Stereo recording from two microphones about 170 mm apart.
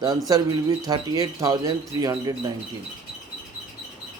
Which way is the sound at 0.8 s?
20° right (ahead or behind).